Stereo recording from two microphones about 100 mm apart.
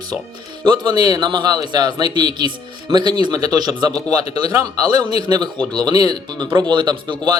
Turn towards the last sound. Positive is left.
turn(degrees=-50)  # may be behind; listen again after turning